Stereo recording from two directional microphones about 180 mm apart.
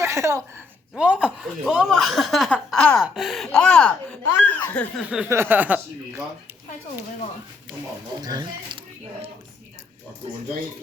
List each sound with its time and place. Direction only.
0.0 s a woman's voice: 15° right (ahead or behind); by 5.0 s 10° left (ahead or behind)
5.0 s speech: 10° right (ahead or behind)
8.2 s speech: 20° right (ahead or behind)